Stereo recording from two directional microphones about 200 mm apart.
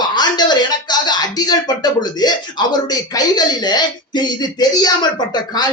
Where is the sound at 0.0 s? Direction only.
20° left (ahead or behind).